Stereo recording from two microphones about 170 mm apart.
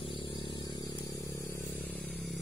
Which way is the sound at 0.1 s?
30° left (ahead or behind).